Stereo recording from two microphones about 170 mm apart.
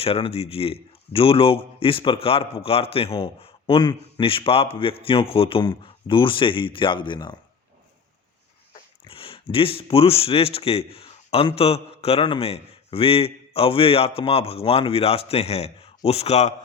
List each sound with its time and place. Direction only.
0.0 s a man's voice: 35° left (ahead or behind)
9.0 s a man's voice: 35° left (ahead or behind)